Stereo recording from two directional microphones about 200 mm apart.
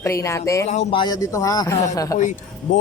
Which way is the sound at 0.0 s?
15° left (ahead or behind).